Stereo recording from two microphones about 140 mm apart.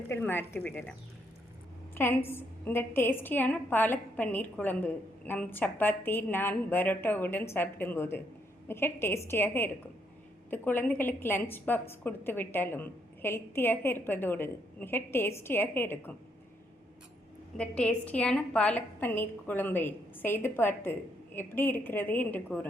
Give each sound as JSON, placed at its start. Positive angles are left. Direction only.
{"t": 0.1, "sound": "a woman's voice", "side_deg": 15}
{"t": 2.0, "sound": "a woman's voice", "side_deg": 15}
{"t": 17.6, "sound": "a woman's voice", "side_deg": 10}